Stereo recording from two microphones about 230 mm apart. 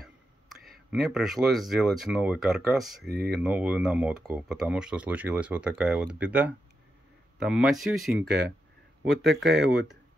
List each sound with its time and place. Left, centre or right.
0.9 s speech: centre
9.3 s speech: right
9.6 s speech: centre